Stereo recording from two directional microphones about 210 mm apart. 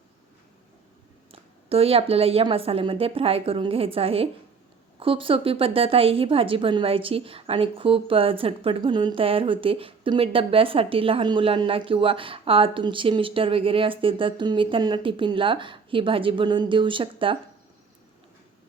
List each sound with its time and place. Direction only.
1.3 s a woman's voice: 25° right (ahead or behind)